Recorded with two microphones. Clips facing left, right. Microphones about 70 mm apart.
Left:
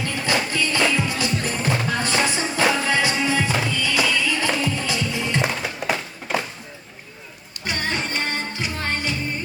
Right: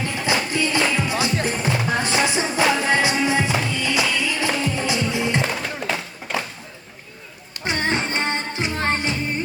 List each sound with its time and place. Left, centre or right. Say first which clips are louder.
0.0 s music: even; right
5.4 s music: even; centre
7.6 s music: right 3 dB; right